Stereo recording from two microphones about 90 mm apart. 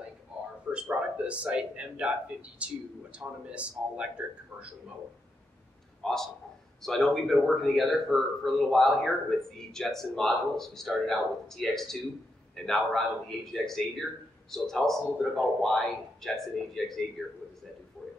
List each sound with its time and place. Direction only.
0.7 s speech: 15° right (ahead or behind)
6.0 s a man's voice: 5° left (ahead or behind)